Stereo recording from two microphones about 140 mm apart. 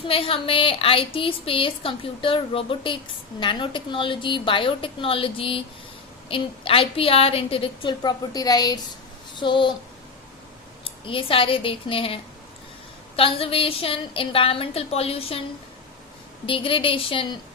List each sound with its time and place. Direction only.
0.0 s a woman's voice: 40° left (ahead or behind)
10.8 s a woman's voice: 40° left (ahead or behind)
16.5 s a woman's voice: 40° left (ahead or behind)